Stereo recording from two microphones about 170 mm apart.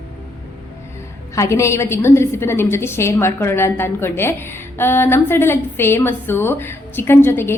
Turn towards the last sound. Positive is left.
turn(degrees=15)  # may be behind; listen again after turning